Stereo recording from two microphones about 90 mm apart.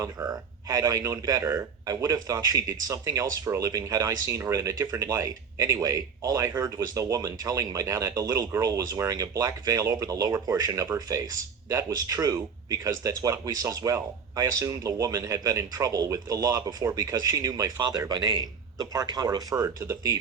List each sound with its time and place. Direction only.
0.0 s speech: 40° right (ahead or behind)